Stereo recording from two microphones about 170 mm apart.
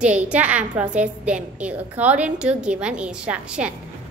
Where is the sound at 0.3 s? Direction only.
10° right (ahead or behind).